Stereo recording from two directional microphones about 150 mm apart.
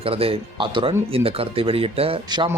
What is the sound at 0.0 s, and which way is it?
Speech, 40° right (ahead or behind).